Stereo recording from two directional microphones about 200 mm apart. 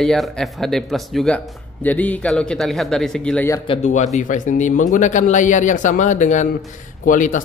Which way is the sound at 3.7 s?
35° left (ahead or behind).